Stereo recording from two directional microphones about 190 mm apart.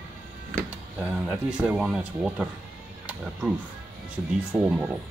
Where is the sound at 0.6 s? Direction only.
10° right (ahead or behind).